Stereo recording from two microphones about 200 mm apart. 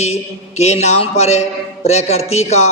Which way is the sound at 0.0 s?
35° left (ahead or behind).